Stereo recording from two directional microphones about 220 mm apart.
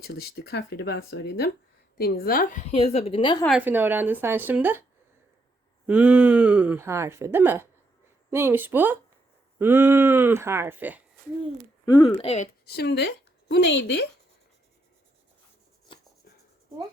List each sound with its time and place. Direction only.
0.0 s a woman's voice: 45° left (ahead or behind); by 3.3 s 25° left (ahead or behind)
3.4 s speech: 5° right (ahead or behind)
11.9 s speech: 25° left (ahead or behind)
12.6 s speech: 45° left (ahead or behind)
15.9 s writing: 20° left (ahead or behind)